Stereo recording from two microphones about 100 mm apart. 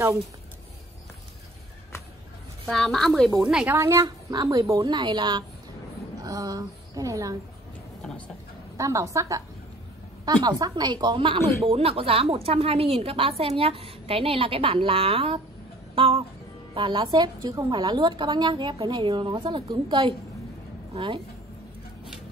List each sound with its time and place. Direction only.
2.7 s a woman's voice: 5° left (ahead or behind)
3.6 s a woman's voice: 25° right (ahead or behind); by 5.4 s 50° right (ahead or behind)
6.2 s speech: 35° right (ahead or behind)
8.7 s a woman's voice: 30° right (ahead or behind)
10.2 s a woman's voice: 45° right (ahead or behind); by 11.4 s 60° right (ahead or behind)
11.6 s a woman's voice: 75° right (ahead or behind)
16.7 s a woman's voice: 55° right (ahead or behind)